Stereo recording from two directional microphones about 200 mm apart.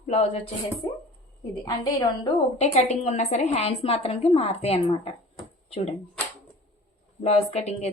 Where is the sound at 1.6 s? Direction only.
20° left (ahead or behind).